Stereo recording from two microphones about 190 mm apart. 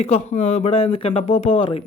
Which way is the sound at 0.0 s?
35° left (ahead or behind).